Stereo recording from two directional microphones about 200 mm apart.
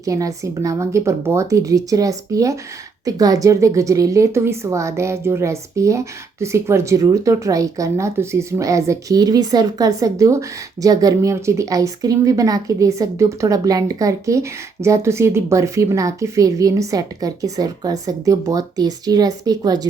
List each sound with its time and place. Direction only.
0.0 s a woman's voice: 15° right (ahead or behind)